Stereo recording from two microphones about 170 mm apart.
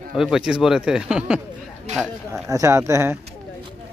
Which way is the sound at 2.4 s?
20° right (ahead or behind).